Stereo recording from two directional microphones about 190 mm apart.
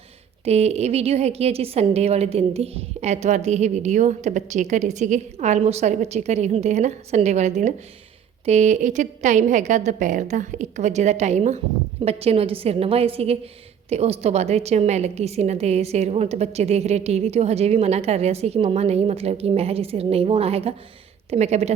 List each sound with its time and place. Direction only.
0.4 s a woman's voice: 35° right (ahead or behind)